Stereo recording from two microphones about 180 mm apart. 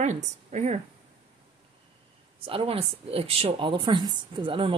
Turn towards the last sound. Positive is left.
turn(degrees=-30)  # may be behind; listen again after turning